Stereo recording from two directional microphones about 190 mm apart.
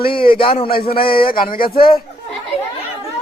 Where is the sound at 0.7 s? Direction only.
50° left (ahead or behind).